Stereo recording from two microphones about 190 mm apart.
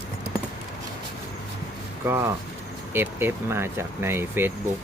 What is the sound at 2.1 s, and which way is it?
Speech, 15° right (ahead or behind).